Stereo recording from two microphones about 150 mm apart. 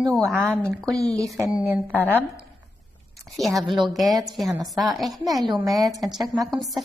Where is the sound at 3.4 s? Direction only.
Centre (ahead or behind).